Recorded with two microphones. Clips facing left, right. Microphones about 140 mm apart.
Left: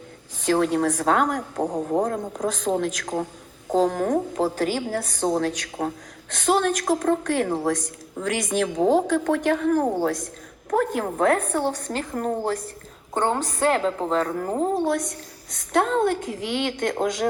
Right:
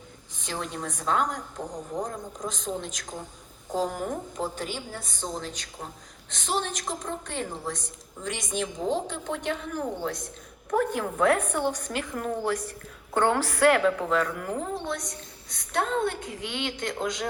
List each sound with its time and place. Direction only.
0.4 s a woman's voice: 60° left (ahead or behind); by 7.7 s 75° left (ahead or behind)
8.2 s a woman's voice: 65° left (ahead or behind)
9.8 s a woman's voice: 45° left (ahead or behind)
13.1 s a woman's voice: 25° left (ahead or behind)
14.8 s a woman's voice: 55° left (ahead or behind)